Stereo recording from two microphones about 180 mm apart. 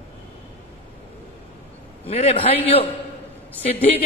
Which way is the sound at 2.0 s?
35° left (ahead or behind).